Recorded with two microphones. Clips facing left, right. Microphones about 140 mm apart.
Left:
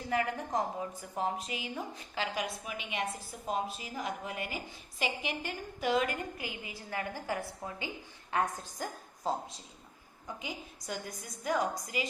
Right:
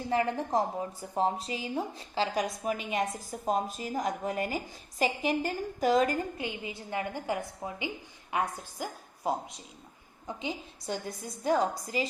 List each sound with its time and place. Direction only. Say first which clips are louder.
0.1 s a woman's voice: right 4 dB; 30° right (ahead or behind); by 9.6 s 10° right (ahead or behind)
10.2 s a woman's voice: right 5 dB; 25° right (ahead or behind)